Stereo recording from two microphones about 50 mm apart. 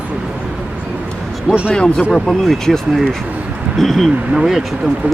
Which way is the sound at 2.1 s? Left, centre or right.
Centre.